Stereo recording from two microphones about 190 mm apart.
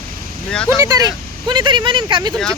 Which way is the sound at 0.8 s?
20° right (ahead or behind).